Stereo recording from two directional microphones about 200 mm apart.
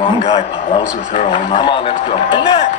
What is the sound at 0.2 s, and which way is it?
A man's voice, 30° left (ahead or behind).